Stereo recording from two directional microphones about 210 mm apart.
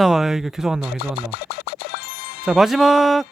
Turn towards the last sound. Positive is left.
turn(degrees=0)  # may be behind; listen again after turning